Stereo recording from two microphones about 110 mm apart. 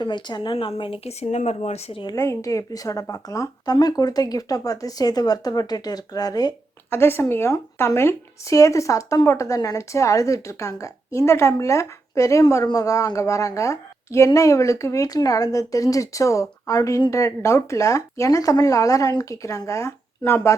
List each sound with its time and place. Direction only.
0.0 s speech: 45° left (ahead or behind); by 2.0 s 80° left
2.1 s speech: 25° left (ahead or behind)
6.9 s speech: 20° left (ahead or behind)